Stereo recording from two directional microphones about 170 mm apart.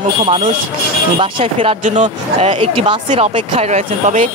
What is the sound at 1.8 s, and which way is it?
Speech, 45° right (ahead or behind).